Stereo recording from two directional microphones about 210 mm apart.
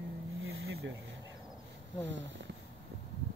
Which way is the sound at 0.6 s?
60° right (ahead or behind).